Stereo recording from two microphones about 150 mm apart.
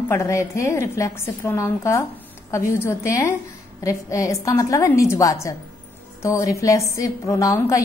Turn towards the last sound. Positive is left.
turn(degrees=20)  # may be behind; listen again after turning